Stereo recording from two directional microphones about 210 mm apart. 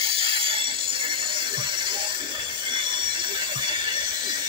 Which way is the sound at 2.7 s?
20° right (ahead or behind).